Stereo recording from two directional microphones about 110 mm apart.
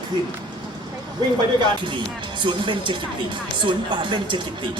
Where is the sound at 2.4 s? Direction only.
50° right (ahead or behind).